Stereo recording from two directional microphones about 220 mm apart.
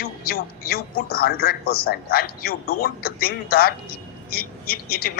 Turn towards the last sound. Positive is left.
turn(degrees=45)  # may be behind; listen again after turning